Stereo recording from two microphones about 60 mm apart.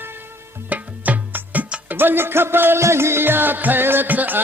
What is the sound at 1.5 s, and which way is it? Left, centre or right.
Music, right.